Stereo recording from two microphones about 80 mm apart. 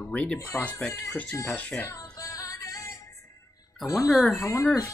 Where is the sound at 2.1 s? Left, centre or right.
Left.